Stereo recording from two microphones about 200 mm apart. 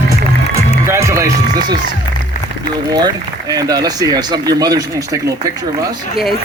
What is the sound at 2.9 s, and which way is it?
A man's voice, 20° right (ahead or behind).